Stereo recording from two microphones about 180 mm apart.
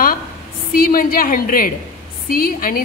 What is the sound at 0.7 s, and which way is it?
A woman's voice, 50° left (ahead or behind).